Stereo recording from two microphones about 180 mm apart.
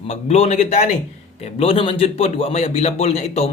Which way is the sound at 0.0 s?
35° left (ahead or behind).